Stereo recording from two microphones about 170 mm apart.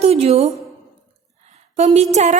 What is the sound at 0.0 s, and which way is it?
A woman's voice, 35° right (ahead or behind).